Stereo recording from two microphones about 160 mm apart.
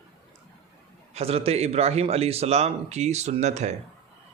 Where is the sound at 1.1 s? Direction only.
40° right (ahead or behind).